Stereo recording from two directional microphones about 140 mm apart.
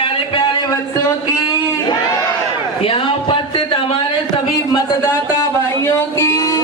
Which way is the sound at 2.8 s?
40° left (ahead or behind).